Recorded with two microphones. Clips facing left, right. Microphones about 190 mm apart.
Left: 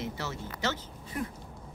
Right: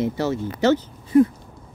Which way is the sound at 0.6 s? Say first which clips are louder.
Right 15 dB; 35° right (ahead or behind).